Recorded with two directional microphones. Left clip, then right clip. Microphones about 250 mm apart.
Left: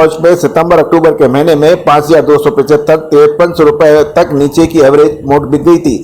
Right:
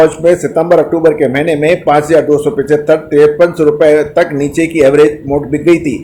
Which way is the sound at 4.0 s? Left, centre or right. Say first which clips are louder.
Left 4 dB; centre.